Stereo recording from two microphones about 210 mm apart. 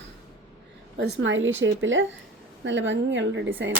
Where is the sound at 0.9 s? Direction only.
55° right (ahead or behind).